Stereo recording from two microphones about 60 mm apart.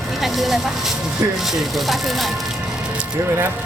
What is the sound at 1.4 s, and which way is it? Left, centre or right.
Speech, centre.